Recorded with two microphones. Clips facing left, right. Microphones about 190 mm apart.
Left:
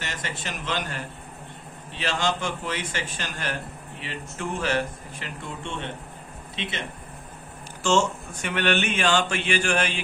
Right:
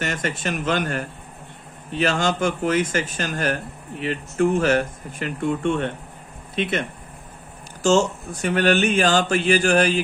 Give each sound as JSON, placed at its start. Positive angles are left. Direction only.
{"t": 0.0, "sound": "speech", "side_deg": -50}
{"t": 7.8, "sound": "speech", "side_deg": -40}